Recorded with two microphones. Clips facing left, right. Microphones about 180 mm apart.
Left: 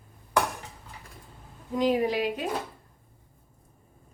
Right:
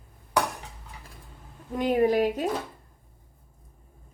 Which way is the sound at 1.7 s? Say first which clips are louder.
Right 2 dB; 55° right (ahead or behind).